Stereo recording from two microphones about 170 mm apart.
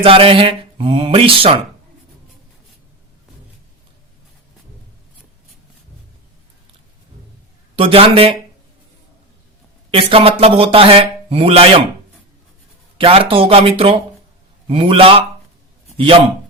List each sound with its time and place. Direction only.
0.0 s speech: 35° right (ahead or behind)
7.8 s speech: 35° right (ahead or behind)
9.9 s speech: 35° right (ahead or behind)
13.0 s a man's voice: 35° right (ahead or behind)